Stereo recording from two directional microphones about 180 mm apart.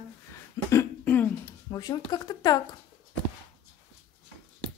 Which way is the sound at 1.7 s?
20° left (ahead or behind).